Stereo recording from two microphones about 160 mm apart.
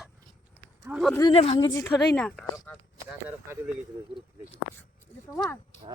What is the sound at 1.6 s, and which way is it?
Speech, 20° left (ahead or behind).